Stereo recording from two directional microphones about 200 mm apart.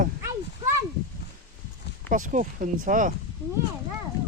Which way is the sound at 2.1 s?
40° right (ahead or behind).